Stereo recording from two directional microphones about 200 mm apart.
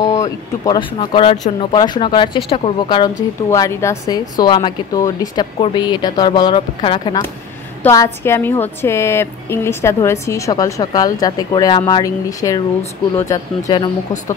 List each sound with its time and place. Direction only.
0.0 s speech: 15° left (ahead or behind)
0.9 s a woman's voice: 30° left (ahead or behind)
3.4 s a woman's voice: 15° left (ahead or behind)
7.8 s a woman's voice: 15° left (ahead or behind)